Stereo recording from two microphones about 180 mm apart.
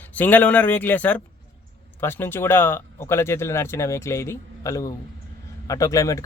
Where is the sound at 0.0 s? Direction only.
10° left (ahead or behind).